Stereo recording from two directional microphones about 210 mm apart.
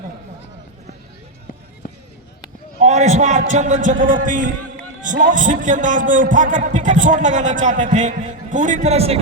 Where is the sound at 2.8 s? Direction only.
35° right (ahead or behind).